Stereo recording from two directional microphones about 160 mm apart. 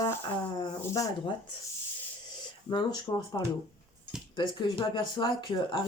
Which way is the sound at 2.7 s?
25° left (ahead or behind).